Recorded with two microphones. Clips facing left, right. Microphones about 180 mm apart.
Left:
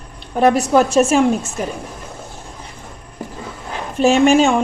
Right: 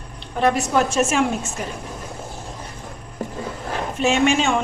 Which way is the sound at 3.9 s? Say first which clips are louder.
Left 7 dB; 35° left (ahead or behind).